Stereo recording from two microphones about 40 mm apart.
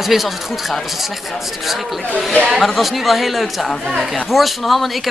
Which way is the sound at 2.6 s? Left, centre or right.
Centre.